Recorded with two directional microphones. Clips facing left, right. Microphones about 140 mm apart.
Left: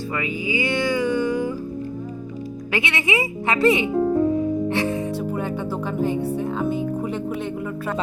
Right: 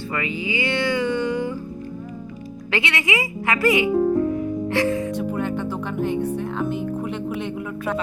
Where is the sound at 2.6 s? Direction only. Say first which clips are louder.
Even; 15° left (ahead or behind).